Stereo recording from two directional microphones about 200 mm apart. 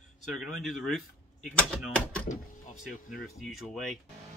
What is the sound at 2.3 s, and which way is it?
Speech, 40° left (ahead or behind).